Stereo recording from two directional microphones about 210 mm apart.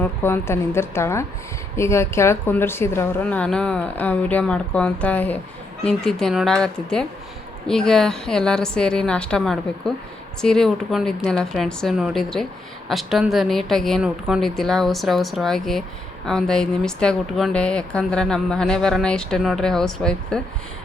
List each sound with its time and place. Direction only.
0.0 s a woman's voice: 10° left (ahead or behind)